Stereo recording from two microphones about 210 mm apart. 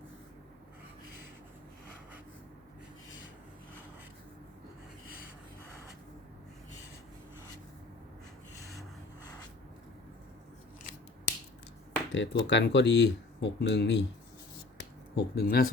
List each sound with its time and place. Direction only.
8.5 s rub: 15° left (ahead or behind)
12.1 s speech: 60° left (ahead or behind)
14.8 s a sound: 50° left (ahead or behind)